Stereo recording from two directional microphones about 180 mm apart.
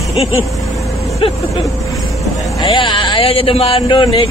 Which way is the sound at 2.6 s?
25° left (ahead or behind).